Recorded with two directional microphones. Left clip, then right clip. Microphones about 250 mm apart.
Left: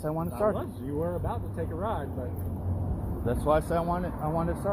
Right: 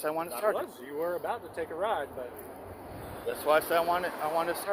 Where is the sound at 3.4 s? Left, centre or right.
Centre.